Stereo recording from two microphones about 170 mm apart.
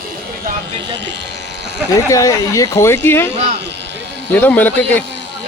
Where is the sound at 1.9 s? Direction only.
20° left (ahead or behind).